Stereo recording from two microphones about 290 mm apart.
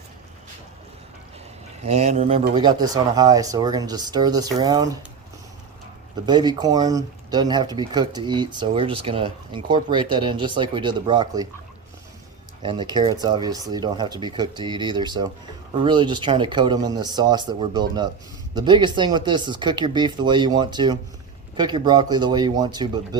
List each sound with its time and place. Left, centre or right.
1.8 s speech: right
6.2 s speech: centre
12.6 s speech: centre